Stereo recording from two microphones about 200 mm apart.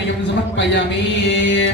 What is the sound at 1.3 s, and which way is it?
Speech, 60° left (ahead or behind).